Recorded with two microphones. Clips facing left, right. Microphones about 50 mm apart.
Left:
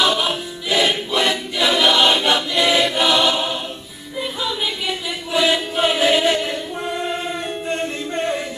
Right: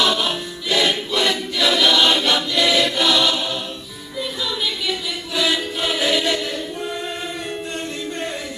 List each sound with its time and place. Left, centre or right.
0.0 s choir: centre
4.2 s music: left